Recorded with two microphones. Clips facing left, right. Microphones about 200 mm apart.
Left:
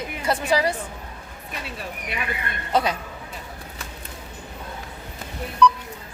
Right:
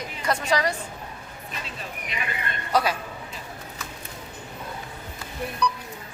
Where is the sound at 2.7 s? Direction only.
20° left (ahead or behind).